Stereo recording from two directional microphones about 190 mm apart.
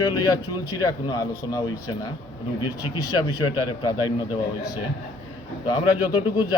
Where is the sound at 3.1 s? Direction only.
20° left (ahead or behind).